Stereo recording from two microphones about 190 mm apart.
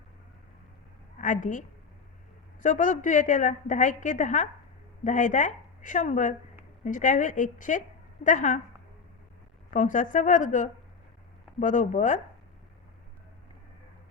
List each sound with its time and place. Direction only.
1.2 s a woman's voice: 40° left (ahead or behind)
9.7 s a woman's voice: 45° left (ahead or behind)